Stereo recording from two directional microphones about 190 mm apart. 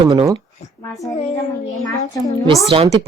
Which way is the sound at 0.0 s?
20° right (ahead or behind).